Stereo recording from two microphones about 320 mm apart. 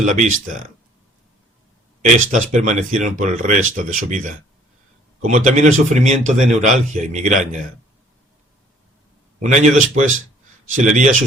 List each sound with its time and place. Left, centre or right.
0.0 s speech: right
2.3 s speech: right
9.4 s speech: right